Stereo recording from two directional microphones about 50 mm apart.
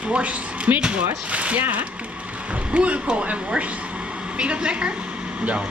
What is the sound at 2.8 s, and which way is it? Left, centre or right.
Speech, right.